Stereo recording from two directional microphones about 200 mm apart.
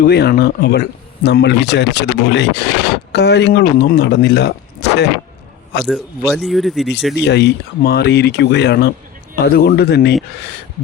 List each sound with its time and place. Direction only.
0.0 s speech: 55° left (ahead or behind)
5.8 s speech: centre (ahead or behind)
7.1 s speech: 60° left (ahead or behind)